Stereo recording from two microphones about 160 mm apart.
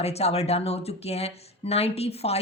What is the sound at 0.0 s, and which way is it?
Speech, 40° left (ahead or behind).